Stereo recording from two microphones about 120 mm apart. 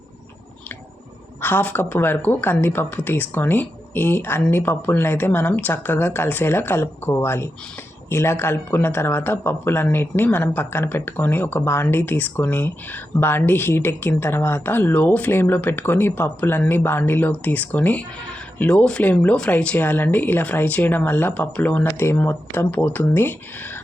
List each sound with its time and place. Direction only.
1.4 s speech: 15° left (ahead or behind)